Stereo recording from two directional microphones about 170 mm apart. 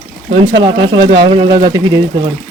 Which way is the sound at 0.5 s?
90° right.